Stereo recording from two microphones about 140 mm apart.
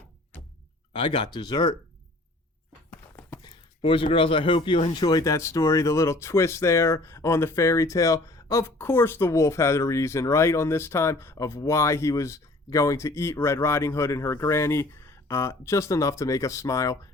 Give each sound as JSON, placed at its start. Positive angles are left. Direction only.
{"t": 0.9, "sound": "speech", "side_deg": 35}
{"t": 3.2, "sound": "a sound", "side_deg": 20}
{"t": 3.4, "sound": "speech", "side_deg": 35}